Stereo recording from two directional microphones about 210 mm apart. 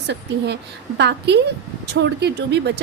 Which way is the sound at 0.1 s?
55° right (ahead or behind).